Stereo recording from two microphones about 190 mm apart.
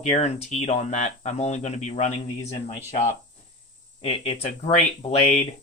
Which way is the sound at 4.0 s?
35° left (ahead or behind).